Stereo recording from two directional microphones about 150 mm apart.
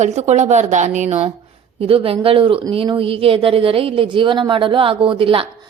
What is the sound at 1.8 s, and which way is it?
Speech, 40° right (ahead or behind).